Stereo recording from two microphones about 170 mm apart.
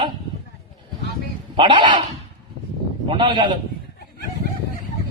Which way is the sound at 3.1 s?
30° right (ahead or behind).